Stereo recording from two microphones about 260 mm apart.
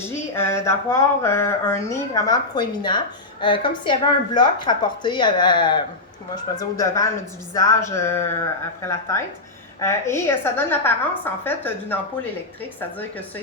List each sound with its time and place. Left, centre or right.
0.0 s a woman's voice: centre